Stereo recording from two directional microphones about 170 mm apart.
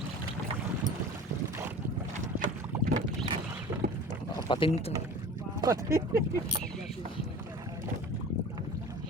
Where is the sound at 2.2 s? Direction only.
50° right (ahead or behind).